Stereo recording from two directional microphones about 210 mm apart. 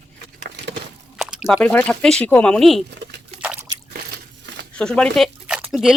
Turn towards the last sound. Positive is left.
turn(degrees=-5)  # may be behind; listen again after turning